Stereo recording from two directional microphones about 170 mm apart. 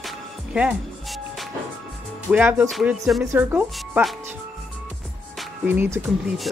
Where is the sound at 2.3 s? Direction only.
10° right (ahead or behind).